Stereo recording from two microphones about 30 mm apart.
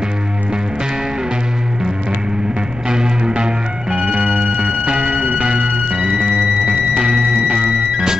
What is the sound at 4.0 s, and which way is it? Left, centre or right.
Music, right.